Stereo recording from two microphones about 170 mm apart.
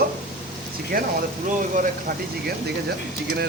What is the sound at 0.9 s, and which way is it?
Speech, 60° right (ahead or behind).